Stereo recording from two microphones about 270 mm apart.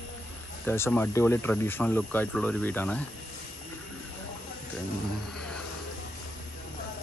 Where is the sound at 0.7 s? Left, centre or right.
Centre.